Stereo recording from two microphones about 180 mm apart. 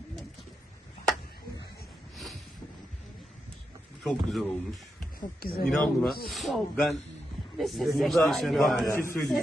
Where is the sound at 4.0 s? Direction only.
Centre (ahead or behind).